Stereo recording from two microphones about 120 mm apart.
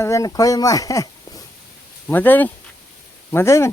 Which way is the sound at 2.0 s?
15° left (ahead or behind).